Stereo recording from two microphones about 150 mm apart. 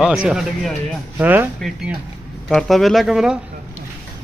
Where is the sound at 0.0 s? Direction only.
5° right (ahead or behind).